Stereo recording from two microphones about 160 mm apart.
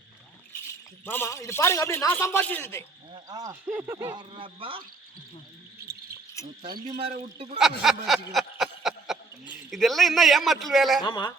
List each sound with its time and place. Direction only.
1.0 s a man's voice: 15° left (ahead or behind)
3.1 s speech: 25° right (ahead or behind)
3.5 s speech: 10° right (ahead or behind)
4.1 s speech: 30° right (ahead or behind)
6.4 s speech: 20° left (ahead or behind)
6.8 s speech: 45° right (ahead or behind)
7.6 s a sound: centre (ahead or behind)
9.6 s a man's voice: centre (ahead or behind)
11.0 s speech: 25° left (ahead or behind)